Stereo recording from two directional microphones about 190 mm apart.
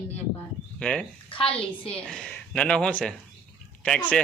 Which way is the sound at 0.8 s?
5° left (ahead or behind).